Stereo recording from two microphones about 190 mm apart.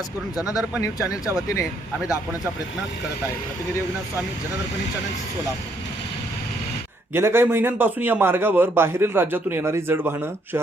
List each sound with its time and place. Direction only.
0.3 s a man's voice: 5° right (ahead or behind)
7.1 s a man's voice: 10° right (ahead or behind)